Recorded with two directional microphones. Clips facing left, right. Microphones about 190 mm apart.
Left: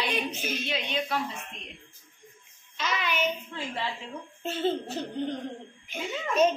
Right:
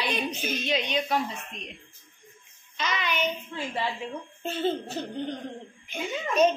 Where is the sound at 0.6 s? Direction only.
15° right (ahead or behind).